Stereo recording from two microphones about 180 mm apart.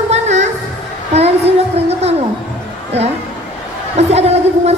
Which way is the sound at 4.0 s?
35° right (ahead or behind).